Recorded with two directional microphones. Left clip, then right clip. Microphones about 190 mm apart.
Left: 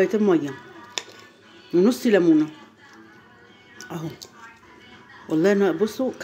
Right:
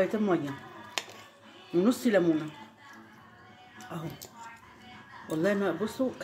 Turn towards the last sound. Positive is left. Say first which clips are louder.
# left 9 dB
turn(degrees=45)  # may be behind; listen again after turning